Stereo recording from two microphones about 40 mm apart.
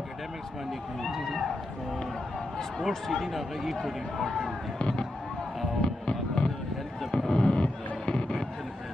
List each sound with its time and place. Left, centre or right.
3.1 s speech: centre
4.7 s speech: left
5.8 s music: centre
7.1 s a sound: centre